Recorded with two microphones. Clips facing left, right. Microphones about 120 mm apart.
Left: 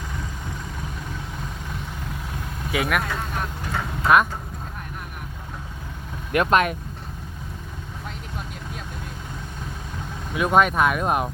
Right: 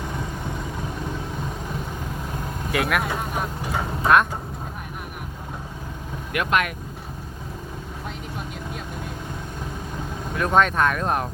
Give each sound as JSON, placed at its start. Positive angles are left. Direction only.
{"t": 2.7, "sound": "speech", "side_deg": 0}
{"t": 3.0, "sound": "vehicle", "side_deg": -15}
{"t": 6.3, "sound": "speech", "side_deg": 35}
{"t": 10.3, "sound": "speech", "side_deg": 10}